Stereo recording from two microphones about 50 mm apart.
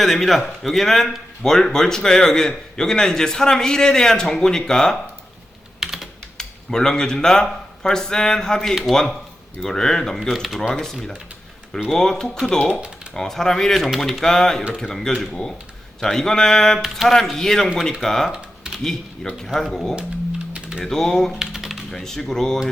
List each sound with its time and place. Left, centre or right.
0.0 s speech: centre
5.8 s computer keyboard: centre
6.3 s speech: centre
10.2 s speech: centre
11.9 s speech: centre
13.8 s speech: centre
20.5 s typing: centre
20.8 s speech: centre
21.3 s typing: centre
22.0 s speech: centre